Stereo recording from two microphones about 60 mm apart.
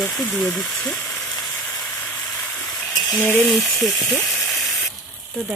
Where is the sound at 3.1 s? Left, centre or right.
Left.